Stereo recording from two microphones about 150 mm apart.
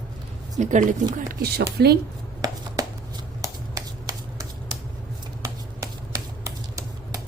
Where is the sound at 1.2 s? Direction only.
90° right.